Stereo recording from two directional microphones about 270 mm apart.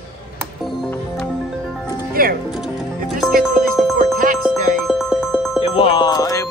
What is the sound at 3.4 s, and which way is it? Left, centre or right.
Music, right.